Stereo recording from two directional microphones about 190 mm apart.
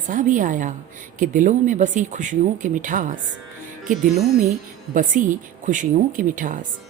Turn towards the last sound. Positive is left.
turn(degrees=-45)  # may be behind; listen again after turning